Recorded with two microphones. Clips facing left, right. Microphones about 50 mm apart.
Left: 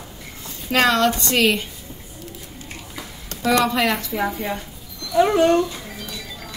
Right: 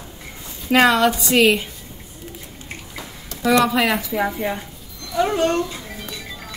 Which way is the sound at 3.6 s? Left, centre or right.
Centre.